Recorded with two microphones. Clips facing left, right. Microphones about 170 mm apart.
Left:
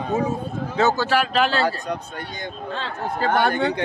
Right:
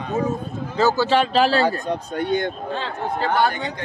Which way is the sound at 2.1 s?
60° right (ahead or behind).